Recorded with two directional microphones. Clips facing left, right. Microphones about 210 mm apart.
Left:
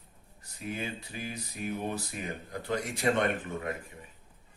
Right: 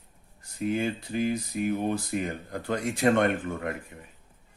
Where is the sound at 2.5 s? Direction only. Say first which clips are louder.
Right 3 dB; 50° right (ahead or behind).